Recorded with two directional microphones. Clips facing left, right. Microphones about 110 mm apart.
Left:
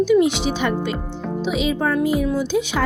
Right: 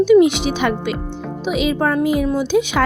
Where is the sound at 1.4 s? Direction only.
60° right (ahead or behind).